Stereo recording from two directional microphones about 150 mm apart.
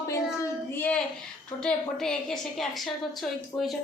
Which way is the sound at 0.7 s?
10° left (ahead or behind).